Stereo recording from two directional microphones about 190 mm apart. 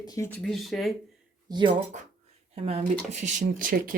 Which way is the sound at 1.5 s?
25° right (ahead or behind).